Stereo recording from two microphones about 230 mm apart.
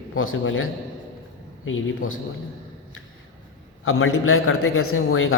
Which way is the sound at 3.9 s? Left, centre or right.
Left.